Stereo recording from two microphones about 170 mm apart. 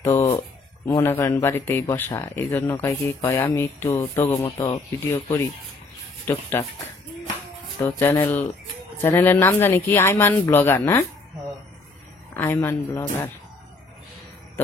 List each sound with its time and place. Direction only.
0.0 s a sound: 15° left (ahead or behind)
0.8 s speech: 20° left (ahead or behind)
7.8 s speech: 10° left (ahead or behind)
12.4 s speech: 15° left (ahead or behind)